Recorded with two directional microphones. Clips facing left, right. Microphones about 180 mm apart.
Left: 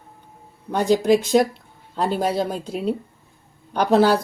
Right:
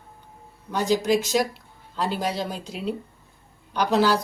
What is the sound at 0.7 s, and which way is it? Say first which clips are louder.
A woman's voice: left 5 dB; 55° left (ahead or behind).